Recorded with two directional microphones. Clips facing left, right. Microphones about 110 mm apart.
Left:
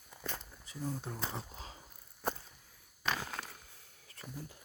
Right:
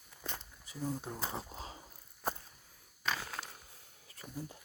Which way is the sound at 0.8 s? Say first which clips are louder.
Right 1 dB; 5° right (ahead or behind).